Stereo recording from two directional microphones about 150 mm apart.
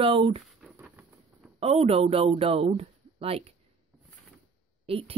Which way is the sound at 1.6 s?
40° right (ahead or behind).